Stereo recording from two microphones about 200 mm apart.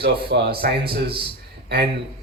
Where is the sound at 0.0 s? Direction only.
55° right (ahead or behind).